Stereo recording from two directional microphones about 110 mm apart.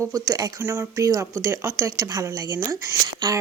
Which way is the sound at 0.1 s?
35° right (ahead or behind).